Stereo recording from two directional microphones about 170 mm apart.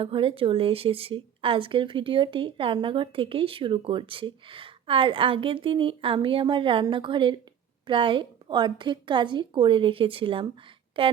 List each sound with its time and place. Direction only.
0.0 s a woman's voice: 30° right (ahead or behind)